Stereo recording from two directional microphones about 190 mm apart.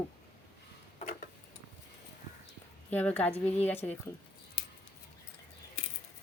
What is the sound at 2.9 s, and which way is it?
Speech, 5° left (ahead or behind).